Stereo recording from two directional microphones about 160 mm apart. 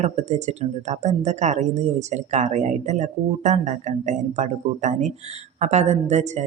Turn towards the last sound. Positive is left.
turn(degrees=-45)  # may be behind; listen again after turning